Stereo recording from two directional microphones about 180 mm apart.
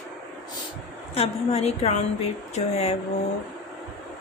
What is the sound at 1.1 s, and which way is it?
Speech, 35° left (ahead or behind).